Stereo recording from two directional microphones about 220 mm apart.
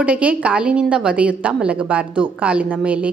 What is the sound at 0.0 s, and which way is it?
A woman's voice, 5° right (ahead or behind).